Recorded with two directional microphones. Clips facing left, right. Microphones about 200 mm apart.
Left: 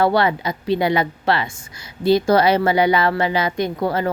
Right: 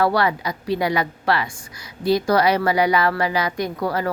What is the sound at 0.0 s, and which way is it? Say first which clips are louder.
Speech: left 2 dB; 25° left (ahead or behind).